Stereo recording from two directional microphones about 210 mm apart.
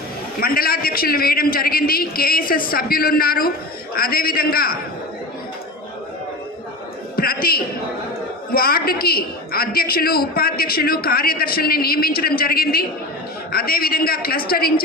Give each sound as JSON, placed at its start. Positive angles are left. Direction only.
{"t": 0.3, "sound": "a woman's voice", "side_deg": 45}
{"t": 7.2, "sound": "a sound", "side_deg": 45}
{"t": 8.5, "sound": "a woman's voice", "side_deg": 45}